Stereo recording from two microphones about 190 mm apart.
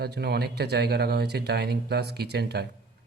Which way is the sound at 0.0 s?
60° right (ahead or behind).